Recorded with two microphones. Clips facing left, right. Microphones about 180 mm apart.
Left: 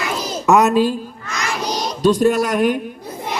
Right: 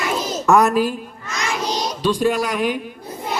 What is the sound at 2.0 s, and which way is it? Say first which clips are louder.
Speech: left 5 dB; 45° left (ahead or behind).